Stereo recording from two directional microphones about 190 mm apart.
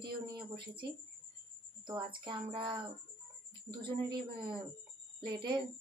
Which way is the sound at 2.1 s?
25° right (ahead or behind).